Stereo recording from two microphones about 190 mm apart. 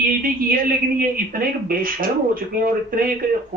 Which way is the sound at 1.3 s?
45° right (ahead or behind).